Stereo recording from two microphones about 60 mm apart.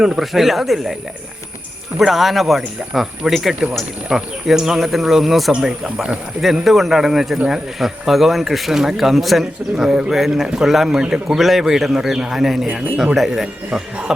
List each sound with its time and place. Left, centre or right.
0.0 s speech: centre
2.0 s speech: centre
9.7 s a man's voice: centre
13.7 s a man's voice: centre